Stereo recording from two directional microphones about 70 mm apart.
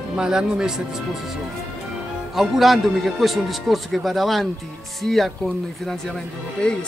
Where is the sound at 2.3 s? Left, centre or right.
Centre.